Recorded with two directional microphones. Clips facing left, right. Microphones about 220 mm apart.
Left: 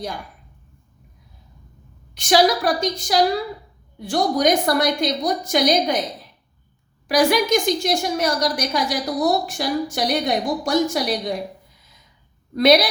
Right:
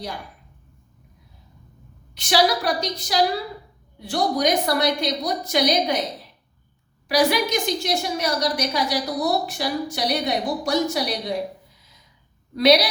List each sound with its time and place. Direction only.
2.1 s a woman's voice: 50° left (ahead or behind)
7.1 s a woman's voice: 50° left (ahead or behind)
12.5 s a woman's voice: 50° left (ahead or behind)